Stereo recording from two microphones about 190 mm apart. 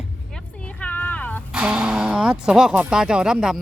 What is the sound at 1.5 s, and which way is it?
Speech, 5° right (ahead or behind).